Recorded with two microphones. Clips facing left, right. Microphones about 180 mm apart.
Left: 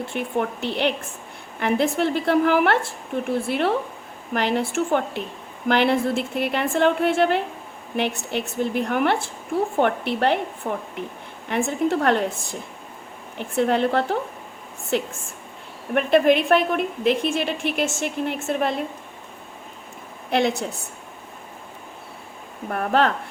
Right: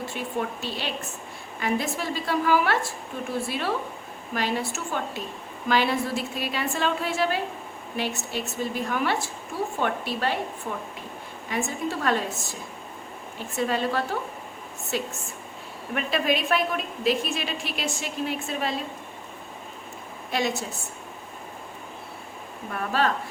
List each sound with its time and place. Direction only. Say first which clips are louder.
0.1 s a woman's voice: left 7 dB; 60° left (ahead or behind)
13.6 s a woman's voice: left 6 dB; 65° left (ahead or behind)
16.0 s a woman's voice: left 9 dB; 60° left (ahead or behind)
20.3 s a woman's voice: left 6 dB; 60° left (ahead or behind)
22.7 s a woman's voice: left 5 dB; 60° left (ahead or behind)